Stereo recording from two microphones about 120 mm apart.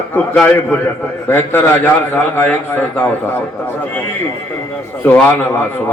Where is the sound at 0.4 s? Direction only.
15° left (ahead or behind).